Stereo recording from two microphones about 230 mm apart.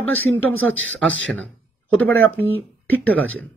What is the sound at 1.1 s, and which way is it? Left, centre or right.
Speech, right.